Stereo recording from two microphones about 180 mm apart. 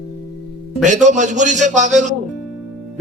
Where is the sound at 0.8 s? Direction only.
40° right (ahead or behind).